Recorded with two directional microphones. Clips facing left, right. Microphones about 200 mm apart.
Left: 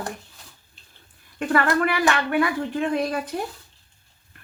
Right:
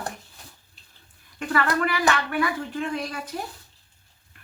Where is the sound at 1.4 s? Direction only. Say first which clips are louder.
Left 3 dB; 40° left (ahead or behind).